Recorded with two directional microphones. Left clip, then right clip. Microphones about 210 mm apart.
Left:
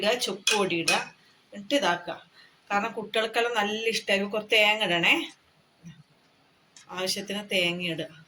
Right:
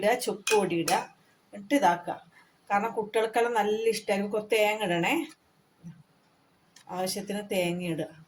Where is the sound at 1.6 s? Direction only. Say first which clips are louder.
Right 1 dB; 50° right (ahead or behind).